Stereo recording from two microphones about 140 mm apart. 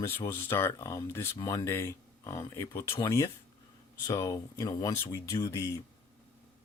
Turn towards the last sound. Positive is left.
turn(degrees=20)  # may be behind; listen again after turning